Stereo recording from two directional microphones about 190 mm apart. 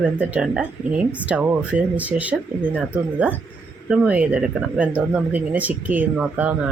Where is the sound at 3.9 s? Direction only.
5° right (ahead or behind).